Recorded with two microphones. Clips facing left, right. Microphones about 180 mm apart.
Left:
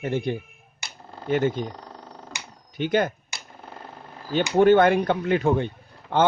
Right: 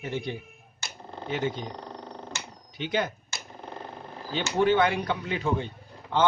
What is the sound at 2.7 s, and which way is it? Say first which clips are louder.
Speech: left 6 dB; 50° left (ahead or behind).